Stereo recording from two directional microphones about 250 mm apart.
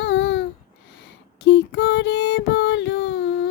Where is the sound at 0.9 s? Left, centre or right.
Left.